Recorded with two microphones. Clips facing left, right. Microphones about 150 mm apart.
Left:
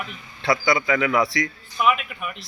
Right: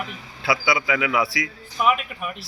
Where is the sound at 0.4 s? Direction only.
5° right (ahead or behind).